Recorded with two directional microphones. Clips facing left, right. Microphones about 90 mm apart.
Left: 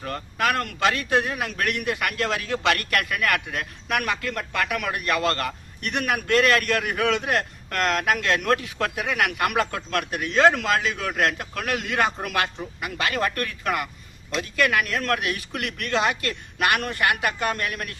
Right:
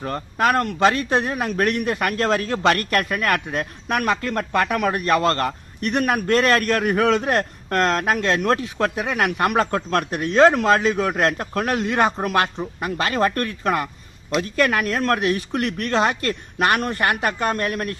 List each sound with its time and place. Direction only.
0.0 s a man's voice: 30° right (ahead or behind)